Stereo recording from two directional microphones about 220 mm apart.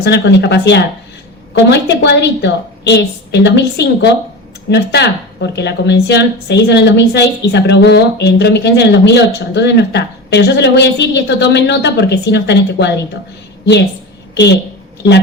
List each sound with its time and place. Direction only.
0.0 s a woman's voice: 50° left (ahead or behind)
14.3 s a woman's voice: 50° left (ahead or behind)